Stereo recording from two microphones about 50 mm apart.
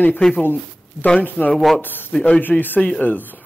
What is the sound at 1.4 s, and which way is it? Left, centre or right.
Speech, left.